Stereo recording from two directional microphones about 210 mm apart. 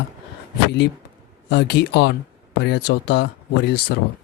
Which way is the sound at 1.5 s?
50° left (ahead or behind).